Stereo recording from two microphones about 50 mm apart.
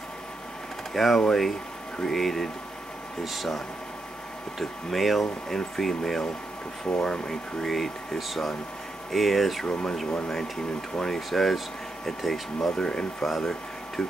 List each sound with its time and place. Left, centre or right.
0.9 s speech: centre
9.7 s speech: centre
11.0 s speech: centre
13.3 s a sound: centre